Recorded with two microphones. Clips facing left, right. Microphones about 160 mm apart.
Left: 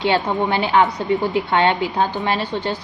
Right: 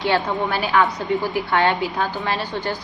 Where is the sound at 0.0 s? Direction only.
25° left (ahead or behind).